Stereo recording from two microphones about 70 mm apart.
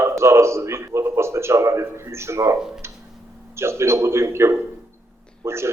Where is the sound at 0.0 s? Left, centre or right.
Right.